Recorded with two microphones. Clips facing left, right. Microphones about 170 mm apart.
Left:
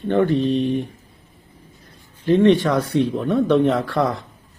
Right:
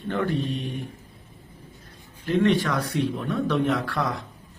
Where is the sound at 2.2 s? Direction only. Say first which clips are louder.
Left 7 dB; 25° left (ahead or behind).